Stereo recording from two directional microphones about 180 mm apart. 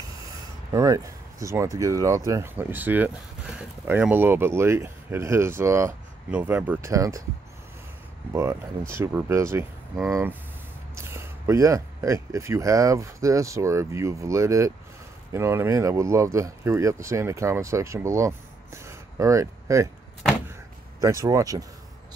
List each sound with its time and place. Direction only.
0.7 s speech: 20° right (ahead or behind)
8.3 s speech: 15° right (ahead or behind)
21.0 s speech: 15° right (ahead or behind)